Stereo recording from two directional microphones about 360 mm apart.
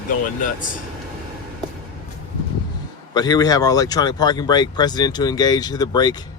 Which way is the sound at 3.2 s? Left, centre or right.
Centre.